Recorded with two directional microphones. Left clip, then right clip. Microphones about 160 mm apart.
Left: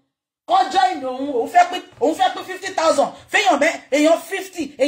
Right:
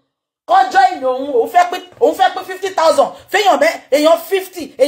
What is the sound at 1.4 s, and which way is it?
A woman's voice, 10° left (ahead or behind).